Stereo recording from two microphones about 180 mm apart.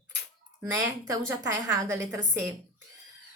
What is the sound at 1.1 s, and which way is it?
A woman's voice, 15° right (ahead or behind).